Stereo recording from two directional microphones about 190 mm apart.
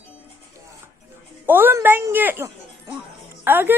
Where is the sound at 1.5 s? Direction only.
10° right (ahead or behind).